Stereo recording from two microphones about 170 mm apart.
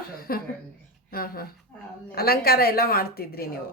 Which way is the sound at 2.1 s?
65° left (ahead or behind).